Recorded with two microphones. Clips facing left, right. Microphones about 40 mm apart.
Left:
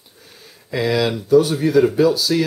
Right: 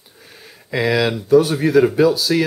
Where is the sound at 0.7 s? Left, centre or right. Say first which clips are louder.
Right 1 dB; centre.